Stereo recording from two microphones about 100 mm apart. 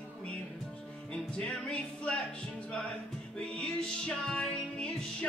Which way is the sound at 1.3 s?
10° left (ahead or behind).